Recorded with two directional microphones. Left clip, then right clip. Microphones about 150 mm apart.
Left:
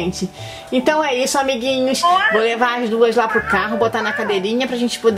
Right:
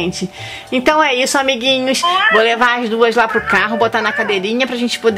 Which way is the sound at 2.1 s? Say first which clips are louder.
Right 1 dB; 15° right (ahead or behind).